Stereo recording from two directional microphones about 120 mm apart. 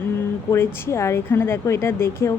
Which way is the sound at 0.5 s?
20° left (ahead or behind).